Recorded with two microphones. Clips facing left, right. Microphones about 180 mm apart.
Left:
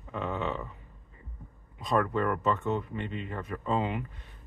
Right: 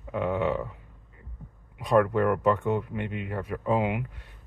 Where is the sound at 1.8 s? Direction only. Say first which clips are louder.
Right 6 dB; 10° right (ahead or behind).